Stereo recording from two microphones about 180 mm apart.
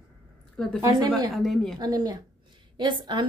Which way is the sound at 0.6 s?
5° left (ahead or behind).